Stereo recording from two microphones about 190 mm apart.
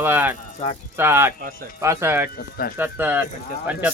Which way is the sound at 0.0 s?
10° right (ahead or behind).